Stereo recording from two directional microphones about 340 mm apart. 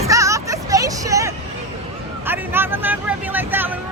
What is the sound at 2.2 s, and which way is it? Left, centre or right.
Speech, centre.